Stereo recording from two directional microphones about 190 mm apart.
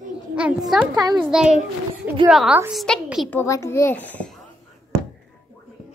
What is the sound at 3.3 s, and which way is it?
A child's voice, 15° left (ahead or behind).